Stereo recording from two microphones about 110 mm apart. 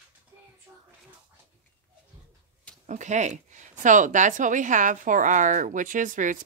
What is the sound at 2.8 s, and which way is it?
Speech, 90° right.